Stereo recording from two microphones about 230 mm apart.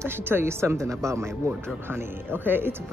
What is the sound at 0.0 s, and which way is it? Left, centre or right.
Speech, centre.